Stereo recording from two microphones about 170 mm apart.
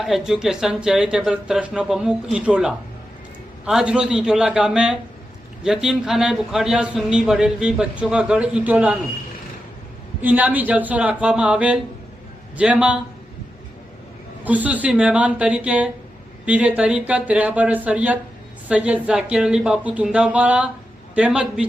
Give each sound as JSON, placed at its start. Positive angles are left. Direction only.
{"t": 0.0, "sound": "speech", "side_deg": 0}
{"t": 10.2, "sound": "speech", "side_deg": -10}
{"t": 14.4, "sound": "speech", "side_deg": -10}